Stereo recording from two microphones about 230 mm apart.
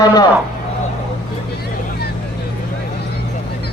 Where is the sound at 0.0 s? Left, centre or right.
Centre.